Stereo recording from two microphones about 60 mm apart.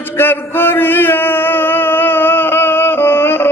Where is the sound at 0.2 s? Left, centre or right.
Left.